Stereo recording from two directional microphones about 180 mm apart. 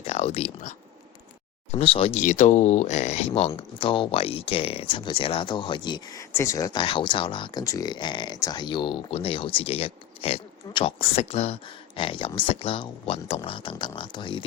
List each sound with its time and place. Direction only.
0.0 s speech: 35° left (ahead or behind)
1.7 s speech: 30° left (ahead or behind)